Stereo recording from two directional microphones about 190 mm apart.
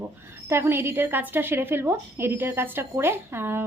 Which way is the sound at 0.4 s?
10° right (ahead or behind).